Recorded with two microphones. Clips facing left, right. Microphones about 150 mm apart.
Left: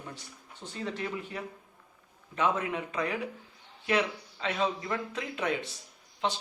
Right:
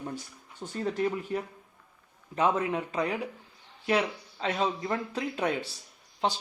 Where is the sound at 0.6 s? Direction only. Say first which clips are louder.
Right 6 dB; 45° right (ahead or behind).